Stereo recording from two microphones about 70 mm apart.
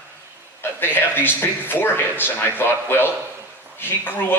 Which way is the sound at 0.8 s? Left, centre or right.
Left.